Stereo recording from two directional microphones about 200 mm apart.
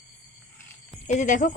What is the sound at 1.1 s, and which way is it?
Speech, 40° left (ahead or behind).